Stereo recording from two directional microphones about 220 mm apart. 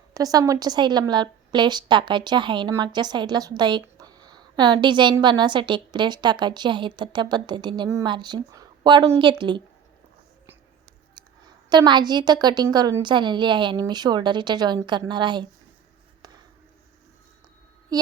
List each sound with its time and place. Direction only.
0.1 s a woman's voice: 15° right (ahead or behind)
11.1 s a woman's voice: 20° right (ahead or behind)
17.9 s a sound: 15° right (ahead or behind)